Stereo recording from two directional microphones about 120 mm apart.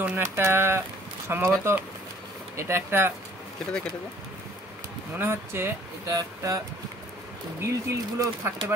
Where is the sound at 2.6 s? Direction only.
20° right (ahead or behind).